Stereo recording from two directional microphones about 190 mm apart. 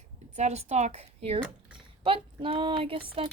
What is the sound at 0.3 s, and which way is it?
A woman's voice, 35° right (ahead or behind).